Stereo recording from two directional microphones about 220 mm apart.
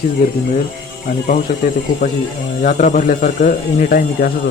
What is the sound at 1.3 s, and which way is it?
A man's voice, 35° left (ahead or behind).